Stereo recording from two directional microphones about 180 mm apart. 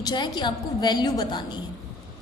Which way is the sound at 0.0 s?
25° left (ahead or behind).